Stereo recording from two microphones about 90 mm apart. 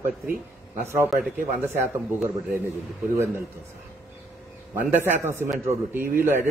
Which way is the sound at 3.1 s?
30° right (ahead or behind).